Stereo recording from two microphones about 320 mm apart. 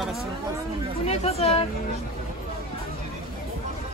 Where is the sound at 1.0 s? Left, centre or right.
Centre.